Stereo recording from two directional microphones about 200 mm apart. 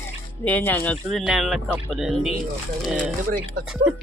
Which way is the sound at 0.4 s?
10° left (ahead or behind).